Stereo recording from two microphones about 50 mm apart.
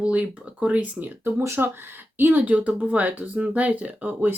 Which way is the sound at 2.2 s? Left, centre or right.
Right.